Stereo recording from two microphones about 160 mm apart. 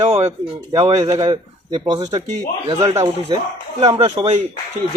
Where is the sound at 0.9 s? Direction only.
20° right (ahead or behind).